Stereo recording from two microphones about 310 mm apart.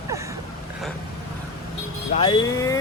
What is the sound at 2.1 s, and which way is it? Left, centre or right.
Speech, centre.